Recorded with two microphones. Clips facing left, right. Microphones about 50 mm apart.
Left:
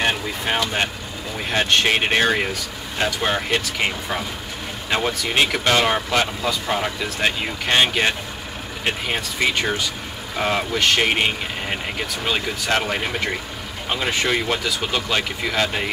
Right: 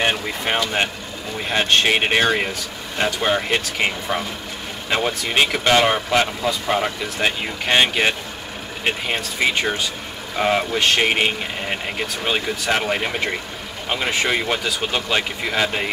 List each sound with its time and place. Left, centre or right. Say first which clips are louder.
0.0 s speech: right 1 dB; centre
1.9 s speech: right 1 dB; centre
9.4 s speech: right 1 dB; centre
14.6 s speech: right 1 dB; right